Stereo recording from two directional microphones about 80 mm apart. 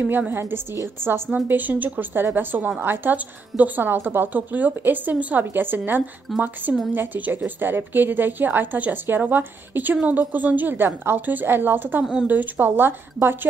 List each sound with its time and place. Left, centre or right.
0.3 s a woman's voice: right
6.3 s speech: centre
6.9 s a woman's voice: right
12.0 s speech: centre
12.3 s a woman's voice: right